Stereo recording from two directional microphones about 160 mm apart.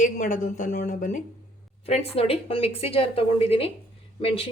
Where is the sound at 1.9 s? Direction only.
40° left (ahead or behind).